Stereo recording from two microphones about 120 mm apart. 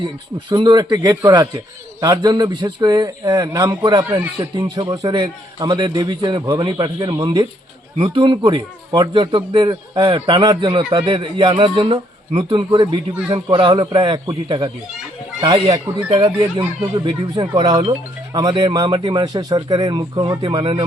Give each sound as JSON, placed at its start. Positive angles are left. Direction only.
{"t": 0.5, "sound": "a man's voice", "side_deg": -40}
{"t": 16.0, "sound": "a man's voice", "side_deg": -45}